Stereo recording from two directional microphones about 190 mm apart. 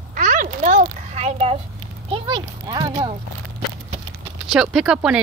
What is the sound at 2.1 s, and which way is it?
Speech, 25° right (ahead or behind).